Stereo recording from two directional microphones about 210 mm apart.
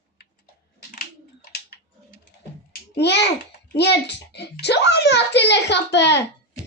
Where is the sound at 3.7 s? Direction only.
55° left (ahead or behind).